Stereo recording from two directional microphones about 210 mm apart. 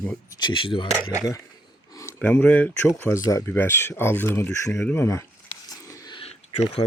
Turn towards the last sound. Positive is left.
turn(degrees=25)  # may be behind; listen again after turning